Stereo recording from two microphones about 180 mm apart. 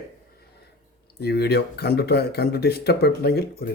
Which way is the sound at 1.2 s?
65° left (ahead or behind).